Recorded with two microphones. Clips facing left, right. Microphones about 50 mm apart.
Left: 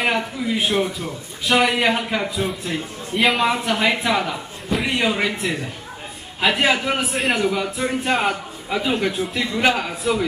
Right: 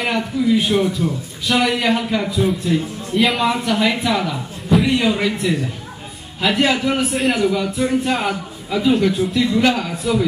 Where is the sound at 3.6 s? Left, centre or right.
Centre.